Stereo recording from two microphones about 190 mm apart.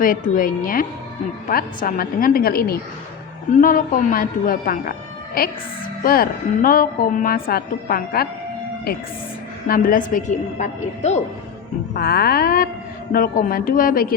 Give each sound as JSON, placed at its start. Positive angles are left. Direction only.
{"t": 0.0, "sound": "a woman's voice", "side_deg": 45}
{"t": 9.6, "sound": "a woman's voice", "side_deg": 45}
{"t": 11.9, "sound": "a woman's voice", "side_deg": 55}